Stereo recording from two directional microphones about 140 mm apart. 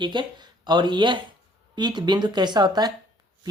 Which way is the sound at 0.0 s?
30° right (ahead or behind).